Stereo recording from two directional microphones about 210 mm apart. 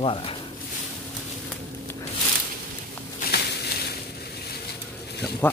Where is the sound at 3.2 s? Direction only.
50° left (ahead or behind).